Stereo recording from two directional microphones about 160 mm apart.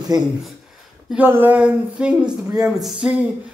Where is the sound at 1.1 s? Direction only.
10° right (ahead or behind).